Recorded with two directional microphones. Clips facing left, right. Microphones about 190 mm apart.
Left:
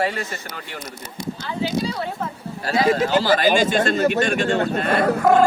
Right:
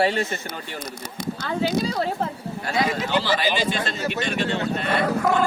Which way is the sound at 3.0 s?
40° left (ahead or behind).